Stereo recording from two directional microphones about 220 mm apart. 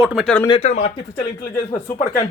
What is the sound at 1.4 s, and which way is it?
Speech, 15° left (ahead or behind).